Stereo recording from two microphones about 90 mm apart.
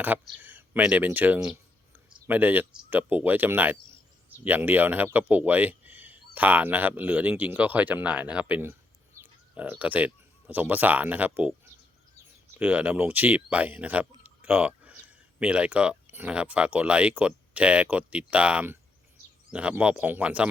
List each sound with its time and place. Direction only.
0.0 s speech: 20° right (ahead or behind)
14.9 s a sound: 15° right (ahead or behind)
16.0 s speech: 20° right (ahead or behind)